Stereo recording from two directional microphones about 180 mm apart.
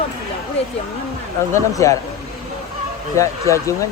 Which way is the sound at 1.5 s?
20° left (ahead or behind).